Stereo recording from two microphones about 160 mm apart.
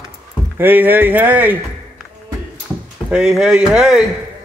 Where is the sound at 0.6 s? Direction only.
10° right (ahead or behind).